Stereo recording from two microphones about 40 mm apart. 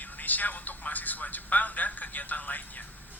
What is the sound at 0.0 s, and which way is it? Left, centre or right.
Speech, left.